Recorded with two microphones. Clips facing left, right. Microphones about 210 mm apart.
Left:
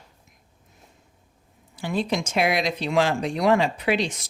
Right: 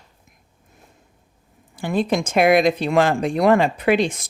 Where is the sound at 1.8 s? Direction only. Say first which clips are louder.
Right 5 dB; 50° right (ahead or behind).